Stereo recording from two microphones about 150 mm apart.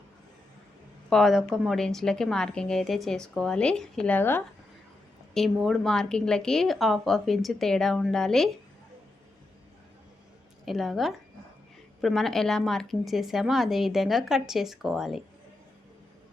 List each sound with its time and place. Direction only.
1.1 s a woman's voice: centre (ahead or behind); by 4.4 s 15° left (ahead or behind)
5.3 s a woman's voice: centre (ahead or behind)
10.7 s a woman's voice: centre (ahead or behind)